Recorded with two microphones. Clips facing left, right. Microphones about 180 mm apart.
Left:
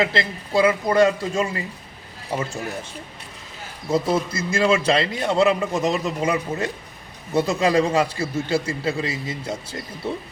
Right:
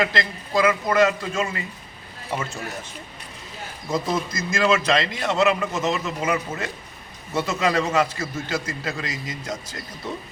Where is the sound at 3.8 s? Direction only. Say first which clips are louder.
Left 4 dB; 30° left (ahead or behind).